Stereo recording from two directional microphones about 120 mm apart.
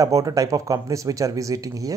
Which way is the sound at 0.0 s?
30° right (ahead or behind).